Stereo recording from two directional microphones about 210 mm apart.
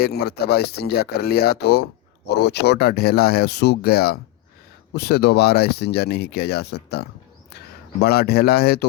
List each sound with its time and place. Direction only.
0.0 s speech: 50° left (ahead or behind)